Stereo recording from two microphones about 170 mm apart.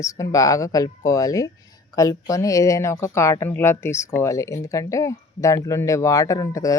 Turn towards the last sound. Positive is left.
turn(degrees=20)  # may be behind; listen again after turning